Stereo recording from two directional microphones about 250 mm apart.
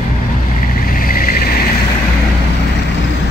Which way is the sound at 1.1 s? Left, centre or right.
Left.